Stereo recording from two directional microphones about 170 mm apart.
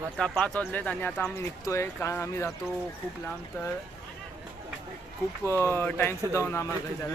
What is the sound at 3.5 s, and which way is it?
Speech, 15° left (ahead or behind).